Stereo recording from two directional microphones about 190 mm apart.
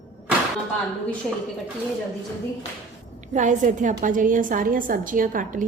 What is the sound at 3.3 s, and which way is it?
A woman's voice, 40° right (ahead or behind).